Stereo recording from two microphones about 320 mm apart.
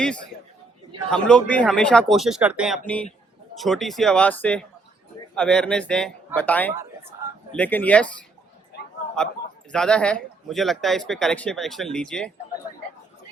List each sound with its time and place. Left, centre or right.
1.1 s speech: centre
9.7 s speech: centre